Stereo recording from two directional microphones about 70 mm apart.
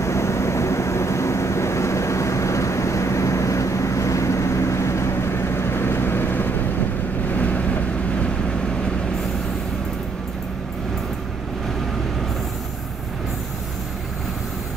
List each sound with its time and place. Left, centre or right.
0.0 s vehicle: left